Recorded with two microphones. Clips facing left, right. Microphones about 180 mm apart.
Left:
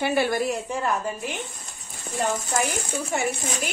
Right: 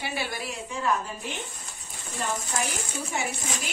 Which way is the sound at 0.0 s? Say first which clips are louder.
Left 10 dB; 50° left (ahead or behind).